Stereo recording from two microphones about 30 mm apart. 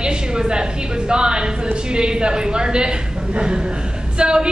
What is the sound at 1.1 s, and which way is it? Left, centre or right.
A woman's voice, right.